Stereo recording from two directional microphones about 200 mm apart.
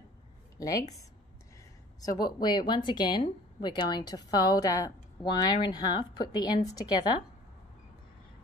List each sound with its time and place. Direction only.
0.6 s speech: 15° left (ahead or behind)
2.0 s a woman's voice: 20° left (ahead or behind)